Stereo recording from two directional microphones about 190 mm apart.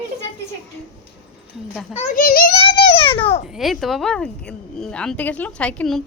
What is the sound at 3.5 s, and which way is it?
Speech, centre (ahead or behind).